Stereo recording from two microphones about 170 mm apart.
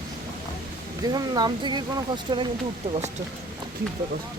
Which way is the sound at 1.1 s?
25° right (ahead or behind).